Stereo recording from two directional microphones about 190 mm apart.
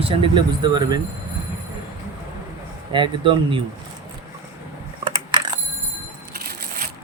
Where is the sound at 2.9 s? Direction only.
25° right (ahead or behind).